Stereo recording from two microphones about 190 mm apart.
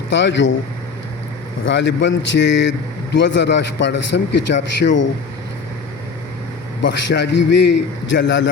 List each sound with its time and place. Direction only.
0.1 s a man's voice: 70° left (ahead or behind)
1.6 s a man's voice: 70° left (ahead or behind)
6.8 s a man's voice: 65° left (ahead or behind)